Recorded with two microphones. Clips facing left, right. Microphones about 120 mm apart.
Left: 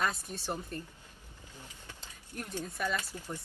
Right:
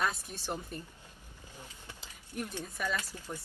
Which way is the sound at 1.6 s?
10° right (ahead or behind).